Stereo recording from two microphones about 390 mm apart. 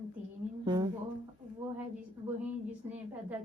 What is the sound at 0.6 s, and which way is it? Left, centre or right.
Speech, centre.